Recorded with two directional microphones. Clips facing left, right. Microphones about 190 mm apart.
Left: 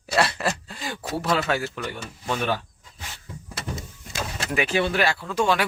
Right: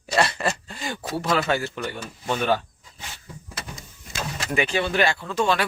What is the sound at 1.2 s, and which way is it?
A man's voice, centre (ahead or behind).